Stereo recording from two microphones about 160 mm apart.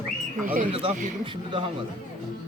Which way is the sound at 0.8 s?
35° right (ahead or behind).